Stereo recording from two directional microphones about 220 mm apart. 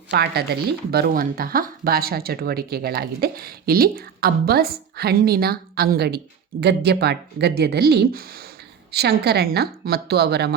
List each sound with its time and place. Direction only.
0.1 s speech: 50° right (ahead or behind)